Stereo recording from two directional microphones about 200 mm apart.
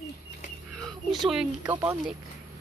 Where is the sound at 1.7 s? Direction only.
10° right (ahead or behind).